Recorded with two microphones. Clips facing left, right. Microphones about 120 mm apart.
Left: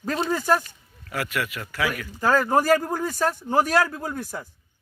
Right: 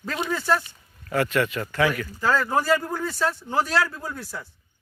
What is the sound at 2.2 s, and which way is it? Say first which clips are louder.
Speech: left 3 dB; 45° left (ahead or behind).